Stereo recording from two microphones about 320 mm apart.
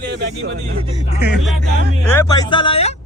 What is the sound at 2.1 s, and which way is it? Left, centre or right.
Speech, centre.